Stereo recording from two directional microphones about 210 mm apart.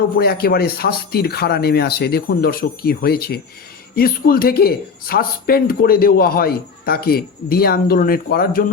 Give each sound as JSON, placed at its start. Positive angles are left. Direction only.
{"t": 0.2, "sound": "speech", "side_deg": 50}